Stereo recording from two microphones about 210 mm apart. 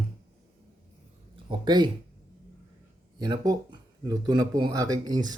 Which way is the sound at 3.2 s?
20° right (ahead or behind).